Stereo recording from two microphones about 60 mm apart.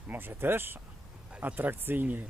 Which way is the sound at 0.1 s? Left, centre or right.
Right.